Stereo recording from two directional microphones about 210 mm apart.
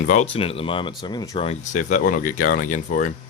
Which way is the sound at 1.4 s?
35° left (ahead or behind).